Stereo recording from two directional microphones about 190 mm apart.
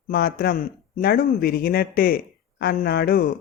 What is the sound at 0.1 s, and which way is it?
A man's voice, 55° left (ahead or behind).